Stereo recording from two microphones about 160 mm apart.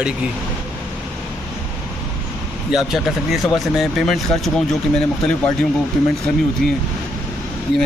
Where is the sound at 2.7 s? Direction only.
Centre (ahead or behind).